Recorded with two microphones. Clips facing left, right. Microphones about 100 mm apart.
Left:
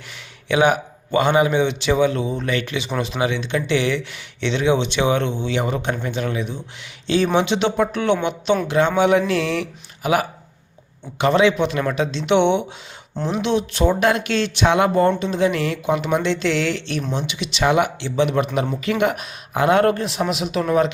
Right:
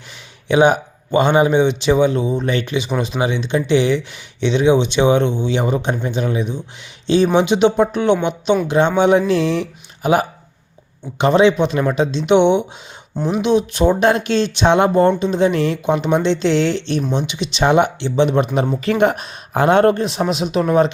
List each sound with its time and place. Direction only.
0.4 s a man's voice: 25° right (ahead or behind)